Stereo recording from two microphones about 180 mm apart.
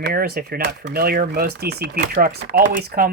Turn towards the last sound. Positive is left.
turn(degrees=-55)  # may be behind; listen again after turning